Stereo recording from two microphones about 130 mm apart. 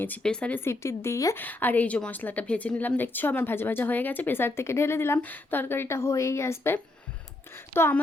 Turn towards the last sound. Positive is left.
turn(degrees=20)  # may be behind; listen again after turning